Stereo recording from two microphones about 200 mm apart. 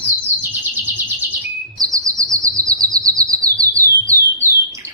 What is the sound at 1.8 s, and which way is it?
Chirp, 15° right (ahead or behind).